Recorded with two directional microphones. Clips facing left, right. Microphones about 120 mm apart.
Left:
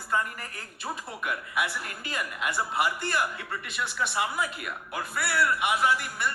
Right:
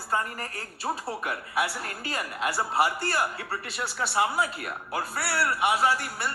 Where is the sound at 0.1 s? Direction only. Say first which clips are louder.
Even; 35° right (ahead or behind).